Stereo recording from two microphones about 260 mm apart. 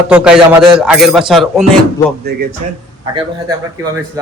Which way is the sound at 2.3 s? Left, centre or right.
Right.